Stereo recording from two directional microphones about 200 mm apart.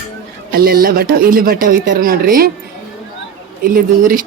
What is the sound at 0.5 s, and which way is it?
Speech, 50° right (ahead or behind).